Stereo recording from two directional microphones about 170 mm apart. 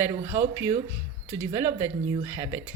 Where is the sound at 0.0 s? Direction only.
15° right (ahead or behind).